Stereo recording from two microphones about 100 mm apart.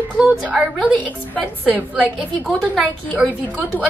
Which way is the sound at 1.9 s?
5° left (ahead or behind).